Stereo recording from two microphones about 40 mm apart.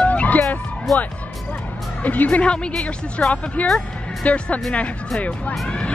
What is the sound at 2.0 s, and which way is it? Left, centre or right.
Music, left.